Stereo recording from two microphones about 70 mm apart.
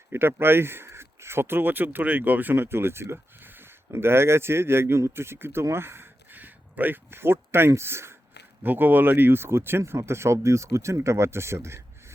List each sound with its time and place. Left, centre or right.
0.1 s speech: right
8.6 s speech: right